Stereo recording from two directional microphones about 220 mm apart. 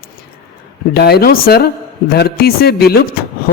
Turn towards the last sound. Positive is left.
turn(degrees=45)  # may be behind; listen again after turning